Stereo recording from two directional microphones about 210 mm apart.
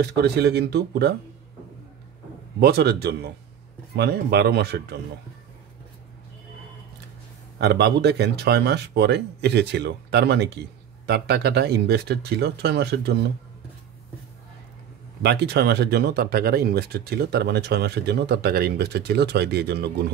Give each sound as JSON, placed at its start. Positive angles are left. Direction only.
{"t": 0.0, "sound": "speech", "side_deg": -50}
{"t": 2.6, "sound": "speech", "side_deg": -50}
{"t": 7.6, "sound": "speech", "side_deg": -50}
{"t": 15.2, "sound": "speech", "side_deg": -50}